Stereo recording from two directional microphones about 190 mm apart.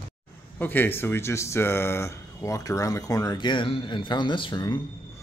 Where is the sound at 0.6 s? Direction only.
10° left (ahead or behind).